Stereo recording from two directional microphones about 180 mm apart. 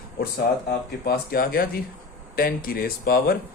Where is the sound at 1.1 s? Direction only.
55° left (ahead or behind).